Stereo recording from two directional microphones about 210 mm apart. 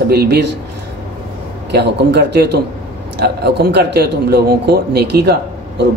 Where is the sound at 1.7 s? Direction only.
50° right (ahead or behind).